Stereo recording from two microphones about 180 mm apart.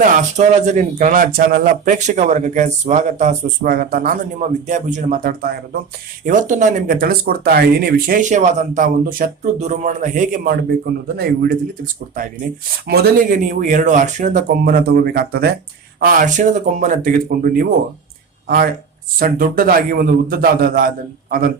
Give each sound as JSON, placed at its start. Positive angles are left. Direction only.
{"t": 0.0, "sound": "speech", "side_deg": -45}
{"t": 3.7, "sound": "speech", "side_deg": -55}
{"t": 12.9, "sound": "speech", "side_deg": -55}